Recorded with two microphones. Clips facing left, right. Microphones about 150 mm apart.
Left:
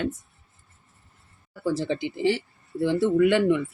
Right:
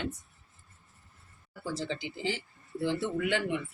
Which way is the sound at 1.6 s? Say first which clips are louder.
Left 9 dB; 60° left (ahead or behind).